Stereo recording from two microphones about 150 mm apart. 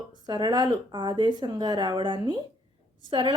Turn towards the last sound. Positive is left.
turn(degrees=-35)  # may be behind; listen again after turning